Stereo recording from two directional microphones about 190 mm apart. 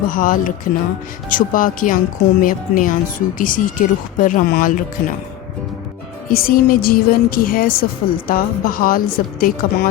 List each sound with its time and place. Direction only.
0.1 s speech: 45° left (ahead or behind)
6.2 s speech: 50° left (ahead or behind)